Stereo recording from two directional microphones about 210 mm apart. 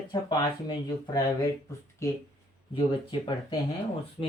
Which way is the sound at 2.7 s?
25° left (ahead or behind).